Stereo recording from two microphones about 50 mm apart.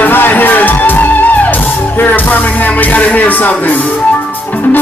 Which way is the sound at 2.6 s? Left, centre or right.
Left.